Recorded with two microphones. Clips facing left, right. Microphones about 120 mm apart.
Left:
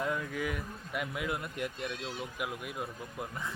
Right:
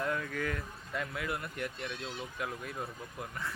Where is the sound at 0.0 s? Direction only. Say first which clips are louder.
Left 1 dB; 15° left (ahead or behind).